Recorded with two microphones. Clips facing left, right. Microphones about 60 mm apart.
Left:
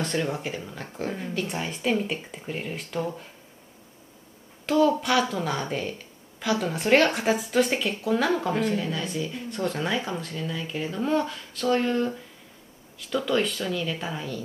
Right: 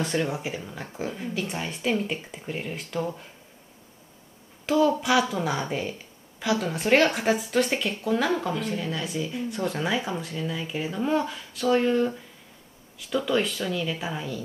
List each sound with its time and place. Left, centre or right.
0.0 s speech: centre
4.6 s speech: centre